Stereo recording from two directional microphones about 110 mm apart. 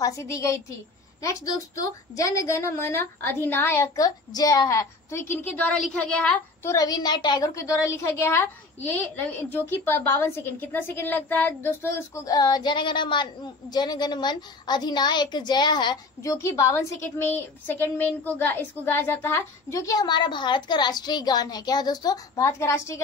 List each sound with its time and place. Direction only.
0.0 s a woman's voice: 25° left (ahead or behind); by 6.4 s 10° left (ahead or behind)
6.6 s a woman's voice: 30° left (ahead or behind)
12.3 s a woman's voice: 35° left (ahead or behind)
16.2 s a woman's voice: 25° left (ahead or behind)
19.9 s a woman's voice: 40° left (ahead or behind)